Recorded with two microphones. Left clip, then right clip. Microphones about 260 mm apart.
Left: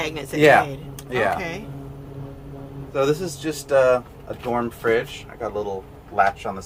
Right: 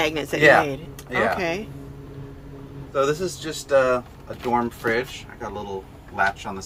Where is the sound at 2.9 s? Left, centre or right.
Left.